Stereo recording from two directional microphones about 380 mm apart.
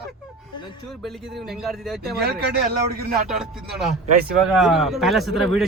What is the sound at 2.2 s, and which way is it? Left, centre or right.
Speech, right.